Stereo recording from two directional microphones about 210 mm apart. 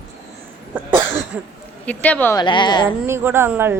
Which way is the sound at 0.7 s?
5° right (ahead or behind).